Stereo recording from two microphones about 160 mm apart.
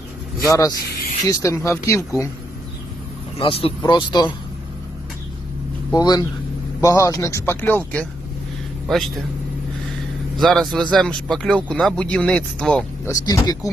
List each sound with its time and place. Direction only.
0.4 s speech: 20° left (ahead or behind)
3.3 s speech: 35° left (ahead or behind)
5.9 s speech: 25° left (ahead or behind)
8.9 s speech: centre (ahead or behind)
10.3 s speech: centre (ahead or behind)
13.1 s speech: 20° left (ahead or behind)